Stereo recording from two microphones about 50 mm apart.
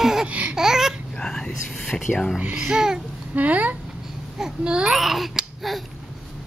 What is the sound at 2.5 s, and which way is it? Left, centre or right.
Speech, centre.